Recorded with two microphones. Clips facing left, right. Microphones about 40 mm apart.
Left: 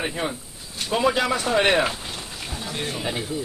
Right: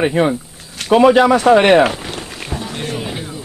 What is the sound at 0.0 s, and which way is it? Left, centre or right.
Speech, right.